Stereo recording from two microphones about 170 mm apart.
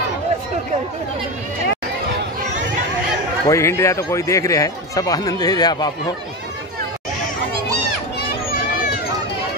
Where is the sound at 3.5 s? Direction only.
15° left (ahead or behind).